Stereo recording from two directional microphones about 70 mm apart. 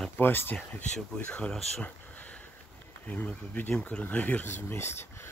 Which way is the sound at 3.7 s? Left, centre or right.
Centre.